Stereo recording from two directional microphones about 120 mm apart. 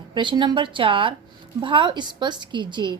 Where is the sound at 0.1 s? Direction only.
40° right (ahead or behind).